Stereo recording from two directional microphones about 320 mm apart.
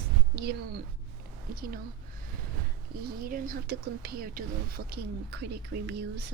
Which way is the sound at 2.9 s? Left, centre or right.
Right.